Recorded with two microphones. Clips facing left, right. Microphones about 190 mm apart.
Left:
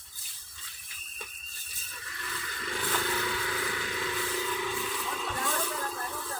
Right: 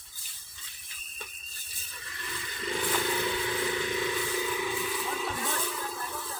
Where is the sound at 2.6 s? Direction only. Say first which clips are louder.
Right 3 dB; 20° right (ahead or behind).